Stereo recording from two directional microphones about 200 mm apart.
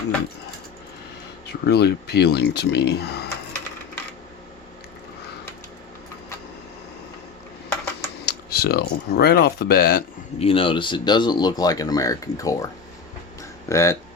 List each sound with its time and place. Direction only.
1.5 s speech: 55° left (ahead or behind)
8.2 s speech: 55° left (ahead or behind)
10.3 s speech: 30° left (ahead or behind)
13.7 s speech: 15° left (ahead or behind)